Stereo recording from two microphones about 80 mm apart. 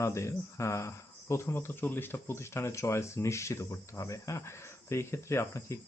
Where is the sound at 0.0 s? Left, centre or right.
Left.